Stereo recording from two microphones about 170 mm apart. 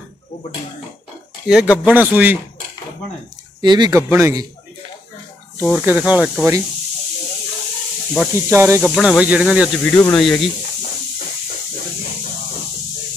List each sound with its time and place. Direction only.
1.5 s speech: 5° right (ahead or behind)
3.6 s speech: 25° right (ahead or behind)
5.7 s speech: 5° right (ahead or behind)
8.4 s speech: 15° right (ahead or behind)
8.9 s speech: centre (ahead or behind)
9.8 s speech: 10° left (ahead or behind)